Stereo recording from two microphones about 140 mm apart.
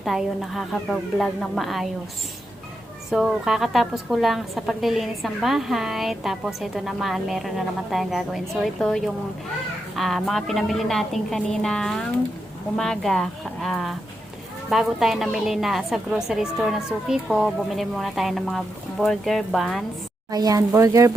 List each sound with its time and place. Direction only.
0.0 s a woman's voice: centre (ahead or behind)
3.1 s a woman's voice: 5° right (ahead or behind)
20.3 s speech: 25° right (ahead or behind)